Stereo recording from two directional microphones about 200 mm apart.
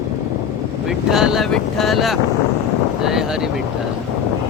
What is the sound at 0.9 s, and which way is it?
Speech, centre (ahead or behind).